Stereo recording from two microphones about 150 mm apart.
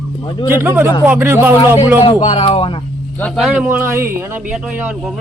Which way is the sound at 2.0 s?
40° left (ahead or behind).